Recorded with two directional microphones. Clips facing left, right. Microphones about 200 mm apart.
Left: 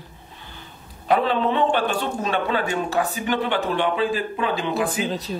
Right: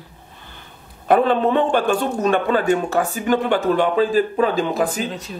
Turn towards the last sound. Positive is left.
turn(degrees=-40)  # may be behind; listen again after turning